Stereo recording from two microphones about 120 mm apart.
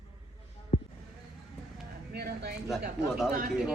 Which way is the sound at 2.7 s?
5° right (ahead or behind).